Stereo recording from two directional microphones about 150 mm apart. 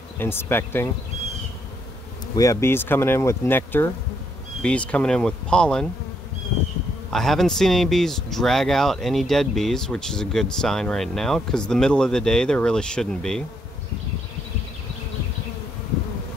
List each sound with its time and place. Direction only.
0.2 s speech: 15° left (ahead or behind)
2.3 s speech: 25° left (ahead or behind); by 5.9 s 5° left (ahead or behind)
7.1 s speech: centre (ahead or behind)